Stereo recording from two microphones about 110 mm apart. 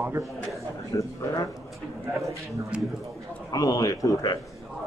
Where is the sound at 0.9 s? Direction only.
35° left (ahead or behind).